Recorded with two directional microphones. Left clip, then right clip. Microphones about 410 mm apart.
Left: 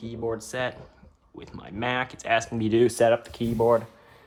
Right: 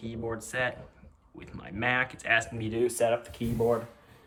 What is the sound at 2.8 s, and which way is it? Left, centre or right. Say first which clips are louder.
Speech: left 5 dB; left.